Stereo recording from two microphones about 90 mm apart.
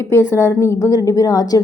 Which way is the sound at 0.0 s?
30° left (ahead or behind).